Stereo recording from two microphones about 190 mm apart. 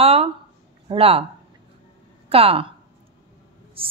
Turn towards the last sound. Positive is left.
turn(degrees=-30)  # may be behind; listen again after turning